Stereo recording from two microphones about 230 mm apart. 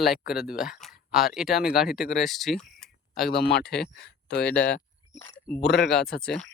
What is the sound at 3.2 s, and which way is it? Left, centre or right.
Speech, left.